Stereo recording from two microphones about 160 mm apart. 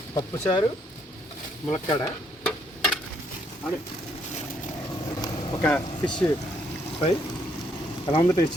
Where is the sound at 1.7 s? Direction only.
30° left (ahead or behind).